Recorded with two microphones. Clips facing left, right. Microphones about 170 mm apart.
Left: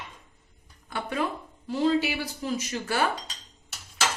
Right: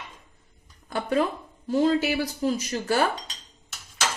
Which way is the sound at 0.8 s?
40° right (ahead or behind).